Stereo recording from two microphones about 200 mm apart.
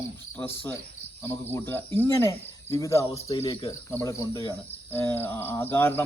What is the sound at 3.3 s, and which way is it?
Speech, 30° left (ahead or behind).